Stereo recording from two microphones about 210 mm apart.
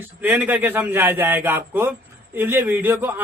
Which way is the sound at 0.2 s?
10° right (ahead or behind).